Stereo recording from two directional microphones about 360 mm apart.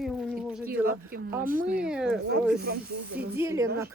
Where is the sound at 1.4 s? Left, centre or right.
Right.